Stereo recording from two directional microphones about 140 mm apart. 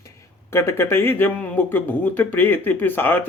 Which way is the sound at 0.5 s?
20° left (ahead or behind).